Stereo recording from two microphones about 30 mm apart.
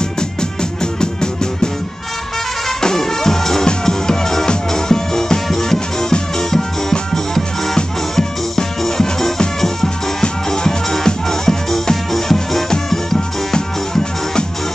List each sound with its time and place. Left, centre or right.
1.0 s music: left
2.8 s music: centre